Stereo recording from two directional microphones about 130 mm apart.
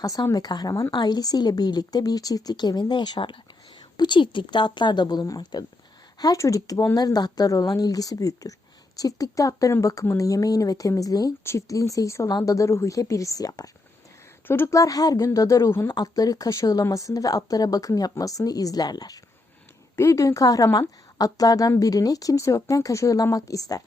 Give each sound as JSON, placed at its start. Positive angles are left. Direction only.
{"t": 0.0, "sound": "a woman's voice", "side_deg": 25}
{"t": 14.4, "sound": "a woman's voice", "side_deg": 15}